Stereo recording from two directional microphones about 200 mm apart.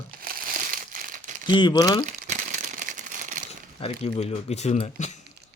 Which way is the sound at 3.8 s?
30° left (ahead or behind).